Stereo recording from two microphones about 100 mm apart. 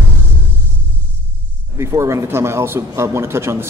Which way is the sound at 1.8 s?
30° right (ahead or behind).